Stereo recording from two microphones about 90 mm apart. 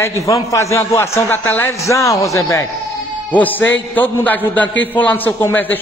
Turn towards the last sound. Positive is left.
turn(degrees=20)  # may be behind; listen again after turning